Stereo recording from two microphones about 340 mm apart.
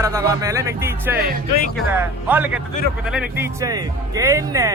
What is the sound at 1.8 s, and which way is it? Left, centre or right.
Speech, centre.